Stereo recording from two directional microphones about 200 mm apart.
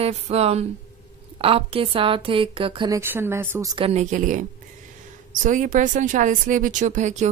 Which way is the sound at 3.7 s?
30° right (ahead or behind).